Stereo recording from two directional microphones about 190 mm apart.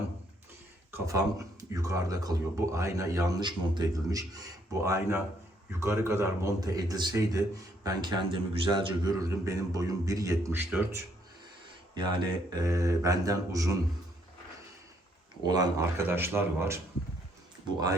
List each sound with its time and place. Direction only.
0.9 s a man's voice: 15° right (ahead or behind)
11.9 s a man's voice: 25° right (ahead or behind)
15.4 s a man's voice: 15° right (ahead or behind)